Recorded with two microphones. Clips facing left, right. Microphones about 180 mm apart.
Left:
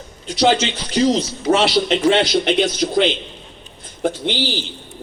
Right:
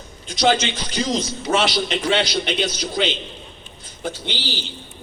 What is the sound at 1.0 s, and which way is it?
A man's voice, 40° left (ahead or behind).